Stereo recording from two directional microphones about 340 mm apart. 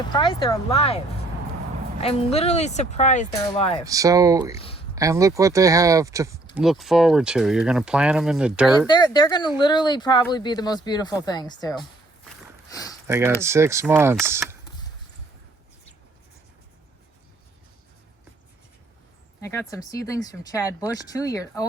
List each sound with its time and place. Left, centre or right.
0.1 s speech: centre
3.8 s speech: centre
4.5 s speech: centre
4.9 s speech: centre
8.9 s speech: centre
12.7 s a sound: centre
13.1 s speech: centre
19.4 s speech: centre